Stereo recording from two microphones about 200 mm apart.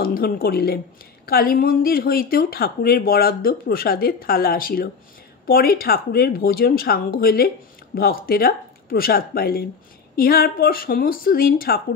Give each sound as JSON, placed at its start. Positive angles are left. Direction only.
{"t": 0.0, "sound": "speech", "side_deg": 45}